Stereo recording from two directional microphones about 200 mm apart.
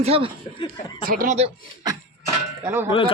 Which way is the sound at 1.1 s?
40° right (ahead or behind).